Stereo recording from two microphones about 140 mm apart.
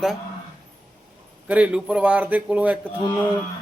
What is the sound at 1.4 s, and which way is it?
A man's voice, 10° right (ahead or behind).